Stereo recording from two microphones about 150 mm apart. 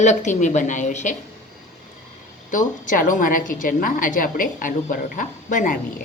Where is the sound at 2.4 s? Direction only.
60° left (ahead or behind).